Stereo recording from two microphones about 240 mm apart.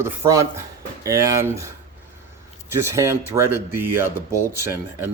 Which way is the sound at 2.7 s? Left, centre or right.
Centre.